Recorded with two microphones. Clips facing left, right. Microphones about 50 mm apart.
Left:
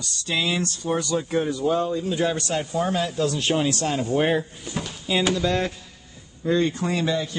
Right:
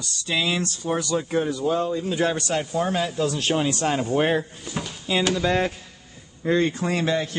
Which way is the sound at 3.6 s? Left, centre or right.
Right.